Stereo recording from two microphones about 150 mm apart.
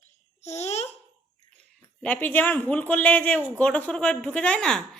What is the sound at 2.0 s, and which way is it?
A man's voice, 10° left (ahead or behind).